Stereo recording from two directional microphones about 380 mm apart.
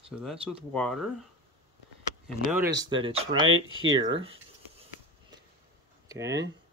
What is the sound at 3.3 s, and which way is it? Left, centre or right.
Speech, right.